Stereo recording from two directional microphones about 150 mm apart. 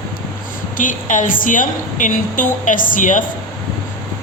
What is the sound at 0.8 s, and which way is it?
A woman's voice, 60° left (ahead or behind).